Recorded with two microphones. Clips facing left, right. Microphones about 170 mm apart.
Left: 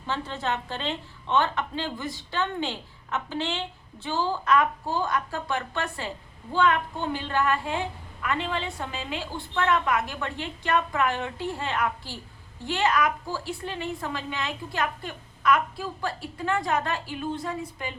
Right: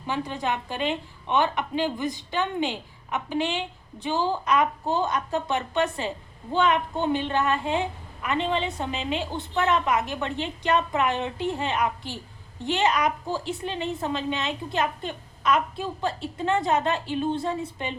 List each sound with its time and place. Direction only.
0.0 s a woman's voice: 15° right (ahead or behind)